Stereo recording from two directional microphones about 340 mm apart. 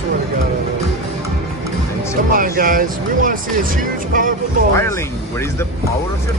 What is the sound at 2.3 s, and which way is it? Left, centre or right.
Speech, right.